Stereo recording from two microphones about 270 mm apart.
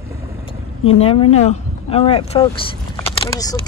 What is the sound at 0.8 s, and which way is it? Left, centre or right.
Speech, left.